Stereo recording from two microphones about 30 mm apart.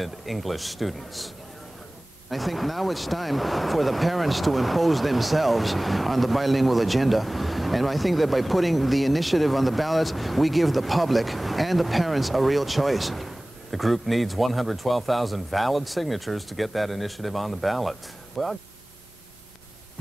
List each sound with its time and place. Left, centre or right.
0.0 s speech: centre